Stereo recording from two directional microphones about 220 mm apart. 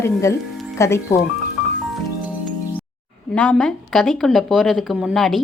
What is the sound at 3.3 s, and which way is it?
A woman's voice, 5° left (ahead or behind).